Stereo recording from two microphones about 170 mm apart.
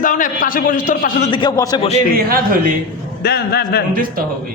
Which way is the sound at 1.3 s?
25° left (ahead or behind).